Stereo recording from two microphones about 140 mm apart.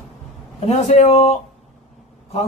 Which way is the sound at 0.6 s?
50° left (ahead or behind).